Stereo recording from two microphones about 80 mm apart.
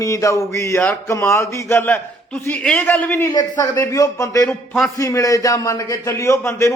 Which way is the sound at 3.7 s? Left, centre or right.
Left.